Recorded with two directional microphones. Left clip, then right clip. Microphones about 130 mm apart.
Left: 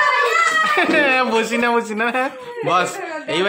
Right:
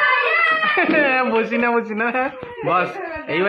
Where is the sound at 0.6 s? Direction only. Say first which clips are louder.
Left 1 dB; 15° left (ahead or behind).